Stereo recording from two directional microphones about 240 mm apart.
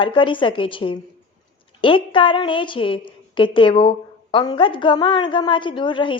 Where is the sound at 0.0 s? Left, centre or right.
Left.